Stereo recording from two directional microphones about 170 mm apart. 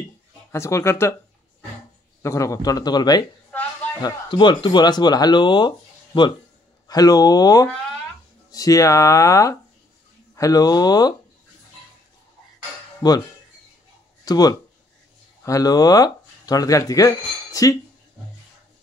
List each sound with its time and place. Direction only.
0.5 s speech: 15° left (ahead or behind)
2.2 s speech: 20° left (ahead or behind)
13.0 s speech: 25° left (ahead or behind)
14.2 s speech: 20° left (ahead or behind)